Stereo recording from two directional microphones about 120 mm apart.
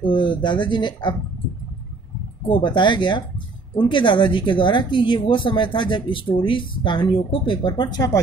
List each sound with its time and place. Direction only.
0.0 s speech: 40° left (ahead or behind)
2.4 s speech: 40° left (ahead or behind)